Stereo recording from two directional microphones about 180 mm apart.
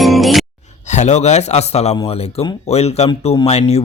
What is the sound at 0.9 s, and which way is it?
Speech, 40° left (ahead or behind).